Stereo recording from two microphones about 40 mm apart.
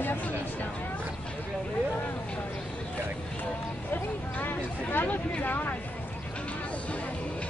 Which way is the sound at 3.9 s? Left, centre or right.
Left.